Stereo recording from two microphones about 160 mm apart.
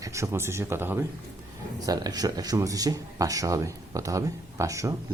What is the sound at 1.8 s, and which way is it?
Speech, 25° right (ahead or behind).